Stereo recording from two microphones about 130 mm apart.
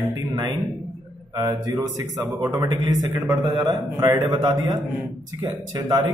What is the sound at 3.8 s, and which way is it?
Speech, 20° right (ahead or behind).